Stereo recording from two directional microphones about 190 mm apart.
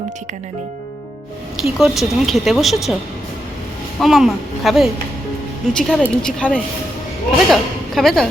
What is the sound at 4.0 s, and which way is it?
A woman's voice, centre (ahead or behind).